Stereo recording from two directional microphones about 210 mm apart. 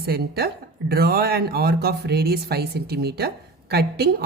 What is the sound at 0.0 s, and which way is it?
Speech, 50° right (ahead or behind).